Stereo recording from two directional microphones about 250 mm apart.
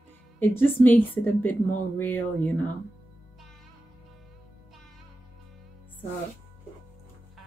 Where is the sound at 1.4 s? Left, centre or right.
Left.